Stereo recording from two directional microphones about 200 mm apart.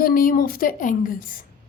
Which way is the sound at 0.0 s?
45° left (ahead or behind).